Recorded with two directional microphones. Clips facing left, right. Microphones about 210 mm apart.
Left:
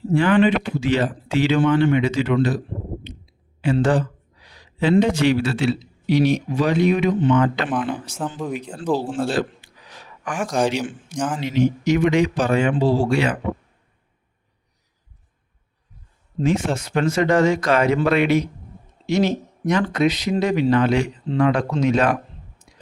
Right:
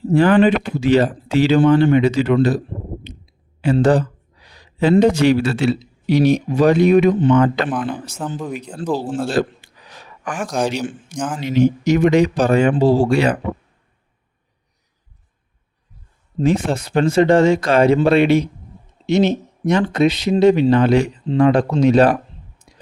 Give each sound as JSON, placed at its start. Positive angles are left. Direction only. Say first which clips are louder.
{"t": 0.1, "sound": "speech", "louder": "right 4 dB", "side_deg": -40}
{"t": 3.6, "sound": "speech", "louder": "right 4 dB", "side_deg": -40}
{"t": 8.4, "sound": "speech", "louder": "right 1 dB", "side_deg": 0}
{"t": 9.4, "sound": "speech", "louder": "right 5 dB", "side_deg": -45}
{"t": 10.4, "sound": "speech", "louder": "even", "side_deg": 0}
{"t": 11.4, "sound": "speech", "louder": "right 5 dB", "side_deg": -45}
{"t": 16.4, "sound": "speech", "louder": "right 3 dB", "side_deg": -35}